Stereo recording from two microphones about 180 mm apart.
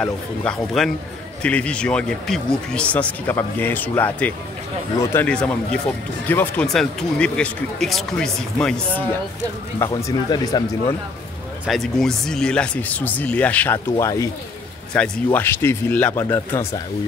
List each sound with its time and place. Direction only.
0.0 s speech: 5° left (ahead or behind)
9.8 s speech: 15° left (ahead or behind)
11.6 s speech: centre (ahead or behind)